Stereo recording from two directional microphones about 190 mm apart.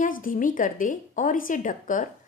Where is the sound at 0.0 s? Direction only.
45° left (ahead or behind).